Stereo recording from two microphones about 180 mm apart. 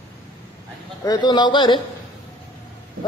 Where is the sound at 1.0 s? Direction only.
25° left (ahead or behind).